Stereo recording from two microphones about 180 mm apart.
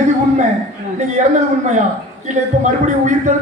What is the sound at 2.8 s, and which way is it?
Speech, 45° right (ahead or behind).